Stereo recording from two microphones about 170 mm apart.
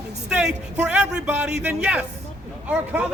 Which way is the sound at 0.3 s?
5° right (ahead or behind).